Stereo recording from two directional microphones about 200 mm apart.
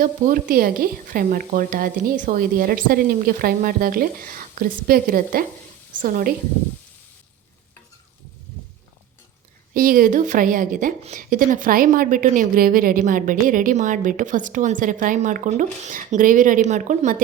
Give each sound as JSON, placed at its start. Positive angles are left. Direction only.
{"t": 0.0, "sound": "a woman's voice", "side_deg": -45}
{"t": 9.7, "sound": "speech", "side_deg": -45}